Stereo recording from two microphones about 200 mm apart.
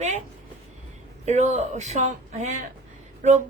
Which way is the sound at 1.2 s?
35° right (ahead or behind).